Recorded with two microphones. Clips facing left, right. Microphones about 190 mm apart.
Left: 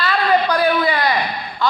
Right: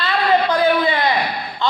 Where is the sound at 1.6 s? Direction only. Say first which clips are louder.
Left 1 dB; 25° right (ahead or behind).